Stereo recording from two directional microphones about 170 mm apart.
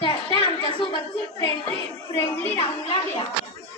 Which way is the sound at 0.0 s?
30° left (ahead or behind).